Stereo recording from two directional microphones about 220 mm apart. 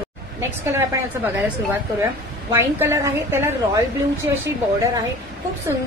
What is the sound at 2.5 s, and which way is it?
Speech, 10° right (ahead or behind).